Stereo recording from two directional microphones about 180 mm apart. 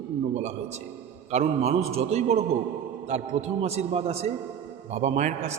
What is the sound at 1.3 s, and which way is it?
A man's voice, 35° right (ahead or behind).